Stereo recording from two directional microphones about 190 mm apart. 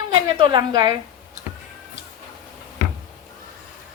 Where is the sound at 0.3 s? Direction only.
25° right (ahead or behind).